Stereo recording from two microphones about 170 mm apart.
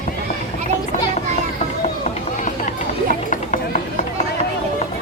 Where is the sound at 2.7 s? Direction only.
50° left (ahead or behind).